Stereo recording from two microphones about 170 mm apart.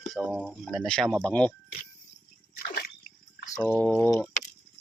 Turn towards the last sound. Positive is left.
turn(degrees=10)  # may be behind; listen again after turning